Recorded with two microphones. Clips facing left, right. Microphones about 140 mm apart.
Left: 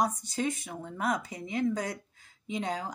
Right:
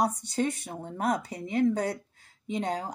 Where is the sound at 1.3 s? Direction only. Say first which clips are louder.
Right 5 dB; 60° right (ahead or behind).